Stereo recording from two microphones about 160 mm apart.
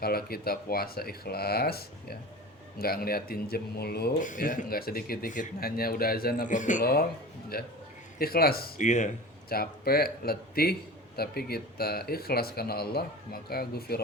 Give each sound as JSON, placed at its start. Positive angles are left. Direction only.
{"t": 0.0, "sound": "speech", "side_deg": 70}
{"t": 4.2, "sound": "speech", "side_deg": 50}
{"t": 7.5, "sound": "speech", "side_deg": 70}
{"t": 8.8, "sound": "speech", "side_deg": 50}
{"t": 9.5, "sound": "speech", "side_deg": 70}